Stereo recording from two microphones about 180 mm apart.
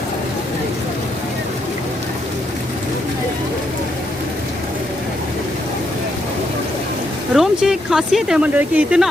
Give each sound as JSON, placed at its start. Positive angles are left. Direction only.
{"t": 7.3, "sound": "speech", "side_deg": -5}